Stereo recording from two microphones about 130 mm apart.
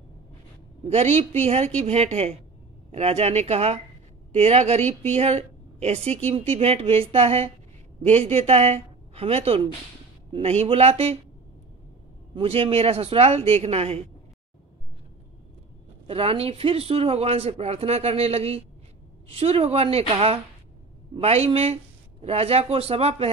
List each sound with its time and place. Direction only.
0.8 s speech: 55° right (ahead or behind)
12.4 s speech: 45° right (ahead or behind)
16.1 s speech: 50° right (ahead or behind)